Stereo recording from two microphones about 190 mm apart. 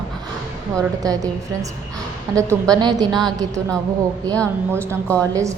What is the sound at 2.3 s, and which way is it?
Speech, 15° right (ahead or behind).